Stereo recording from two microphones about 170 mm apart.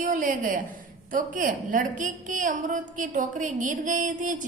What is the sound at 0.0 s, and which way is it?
A woman's voice, 55° right (ahead or behind).